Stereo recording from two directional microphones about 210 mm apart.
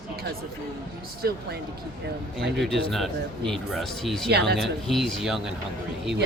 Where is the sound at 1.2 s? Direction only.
50° right (ahead or behind).